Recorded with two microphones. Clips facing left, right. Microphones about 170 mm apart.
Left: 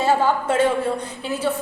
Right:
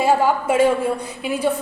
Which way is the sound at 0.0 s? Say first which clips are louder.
Right 2 dB; 10° right (ahead or behind).